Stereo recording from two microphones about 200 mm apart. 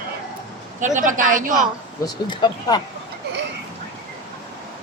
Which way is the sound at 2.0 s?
20° left (ahead or behind).